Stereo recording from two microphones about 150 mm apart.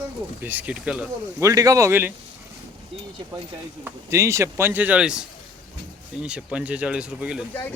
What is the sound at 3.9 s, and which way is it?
Speech, 20° right (ahead or behind).